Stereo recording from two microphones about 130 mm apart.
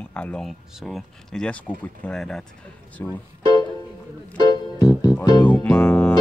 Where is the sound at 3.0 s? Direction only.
20° left (ahead or behind).